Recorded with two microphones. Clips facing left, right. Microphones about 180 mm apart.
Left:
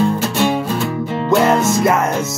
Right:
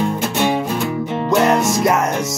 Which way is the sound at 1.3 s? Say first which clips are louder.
Left 1 dB; centre (ahead or behind).